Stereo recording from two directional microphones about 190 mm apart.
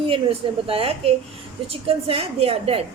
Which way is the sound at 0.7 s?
30° right (ahead or behind).